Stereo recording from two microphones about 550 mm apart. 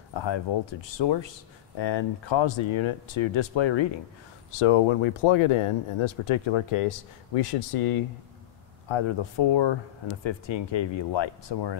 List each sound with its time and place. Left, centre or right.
0.1 s speech: left